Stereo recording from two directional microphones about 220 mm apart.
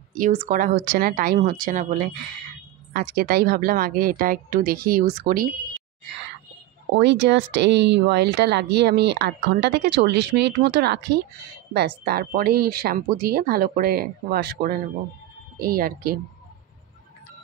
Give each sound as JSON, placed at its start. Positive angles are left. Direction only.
{"t": 0.1, "sound": "a woman's voice", "side_deg": -40}
{"t": 7.0, "sound": "a woman's voice", "side_deg": -50}